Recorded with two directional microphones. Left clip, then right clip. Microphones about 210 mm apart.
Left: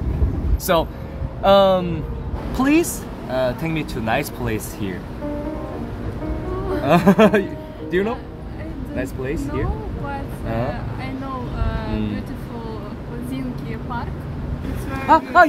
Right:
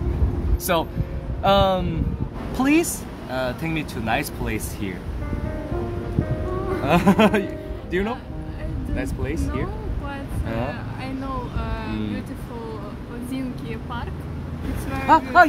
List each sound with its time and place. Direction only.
0.7 s speech: 10° left (ahead or behind)
6.8 s speech: 10° left (ahead or behind)
11.7 s a sound: 20° right (ahead or behind)
15.0 s speech: centre (ahead or behind)